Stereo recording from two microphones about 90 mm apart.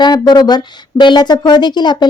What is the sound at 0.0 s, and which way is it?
Speech, 50° left (ahead or behind).